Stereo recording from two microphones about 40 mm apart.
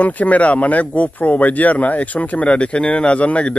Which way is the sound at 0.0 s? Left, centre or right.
Left.